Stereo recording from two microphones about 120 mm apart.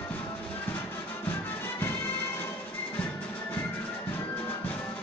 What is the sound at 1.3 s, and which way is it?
Music, 20° left (ahead or behind).